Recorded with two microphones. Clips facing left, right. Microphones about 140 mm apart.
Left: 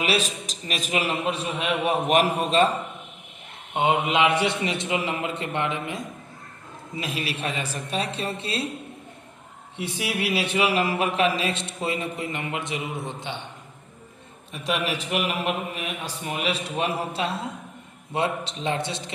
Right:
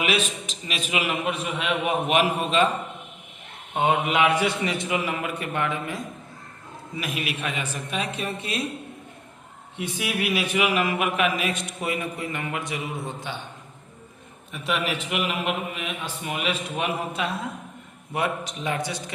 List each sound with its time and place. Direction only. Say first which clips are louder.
0.0 s a man's voice: even; 35° left (ahead or behind)
3.8 s a man's voice: even; 20° left (ahead or behind)
9.7 s a man's voice: even; 30° left (ahead or behind)
14.9 s a man's voice: left 1 dB; 35° left (ahead or behind)